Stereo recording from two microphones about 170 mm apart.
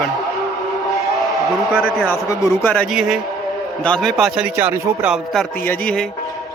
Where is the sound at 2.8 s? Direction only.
Centre (ahead or behind).